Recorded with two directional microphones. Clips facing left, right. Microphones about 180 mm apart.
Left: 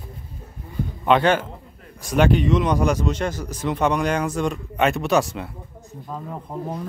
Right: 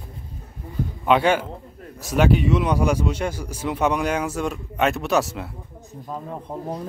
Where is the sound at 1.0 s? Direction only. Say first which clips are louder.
Left 1 dB; 10° right (ahead or behind).